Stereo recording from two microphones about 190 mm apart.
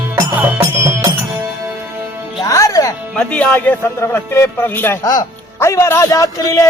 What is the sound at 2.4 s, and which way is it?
Music, 15° left (ahead or behind).